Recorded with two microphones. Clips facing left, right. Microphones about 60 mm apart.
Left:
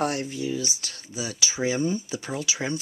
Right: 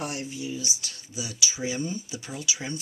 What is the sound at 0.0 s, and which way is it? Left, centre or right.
Speech, left.